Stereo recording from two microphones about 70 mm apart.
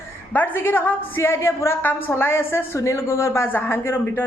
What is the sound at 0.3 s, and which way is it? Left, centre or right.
A woman's voice, left.